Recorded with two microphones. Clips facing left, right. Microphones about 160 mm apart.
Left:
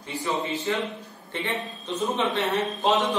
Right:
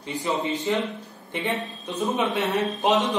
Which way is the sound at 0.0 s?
20° right (ahead or behind).